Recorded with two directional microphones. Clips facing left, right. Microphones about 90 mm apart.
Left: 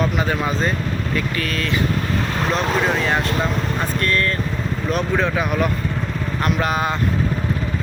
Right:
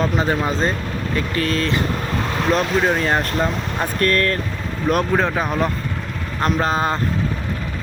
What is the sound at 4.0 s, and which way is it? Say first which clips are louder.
Speech: right 4 dB; 55° right (ahead or behind).